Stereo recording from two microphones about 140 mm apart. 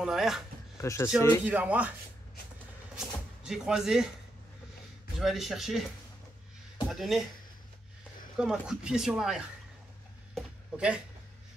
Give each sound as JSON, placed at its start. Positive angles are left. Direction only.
{"t": 0.0, "sound": "speech", "side_deg": 0}
{"t": 0.7, "sound": "speech", "side_deg": 20}
{"t": 1.4, "sound": "speech", "side_deg": -10}
{"t": 3.0, "sound": "speech", "side_deg": -5}
{"t": 5.2, "sound": "speech", "side_deg": 0}
{"t": 6.9, "sound": "speech", "side_deg": 0}
{"t": 8.4, "sound": "speech", "side_deg": -5}
{"t": 10.3, "sound": "a sound", "side_deg": -5}